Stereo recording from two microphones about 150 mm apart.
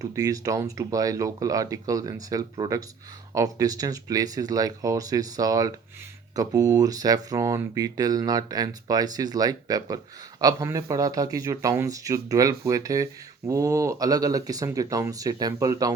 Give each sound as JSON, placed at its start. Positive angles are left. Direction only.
{"t": 0.0, "sound": "speech", "side_deg": -25}